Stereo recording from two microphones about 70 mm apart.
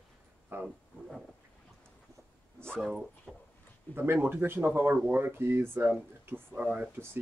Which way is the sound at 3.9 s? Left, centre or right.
Right.